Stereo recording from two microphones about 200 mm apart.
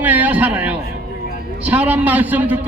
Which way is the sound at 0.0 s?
10° right (ahead or behind).